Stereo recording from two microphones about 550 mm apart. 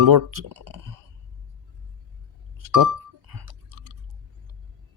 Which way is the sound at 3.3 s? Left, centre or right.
Right.